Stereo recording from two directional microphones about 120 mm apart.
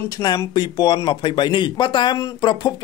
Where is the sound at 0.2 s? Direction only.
25° left (ahead or behind).